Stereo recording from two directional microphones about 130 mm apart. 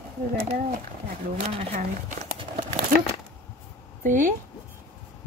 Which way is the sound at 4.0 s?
90° right.